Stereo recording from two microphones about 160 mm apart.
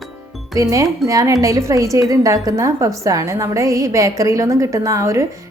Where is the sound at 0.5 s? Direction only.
20° right (ahead or behind).